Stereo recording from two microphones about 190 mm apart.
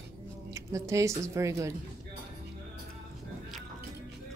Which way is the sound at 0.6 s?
15° right (ahead or behind).